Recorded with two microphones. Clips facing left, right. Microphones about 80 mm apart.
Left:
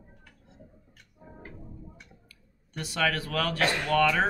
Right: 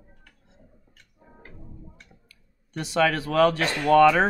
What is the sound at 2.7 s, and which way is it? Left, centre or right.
Speech, right.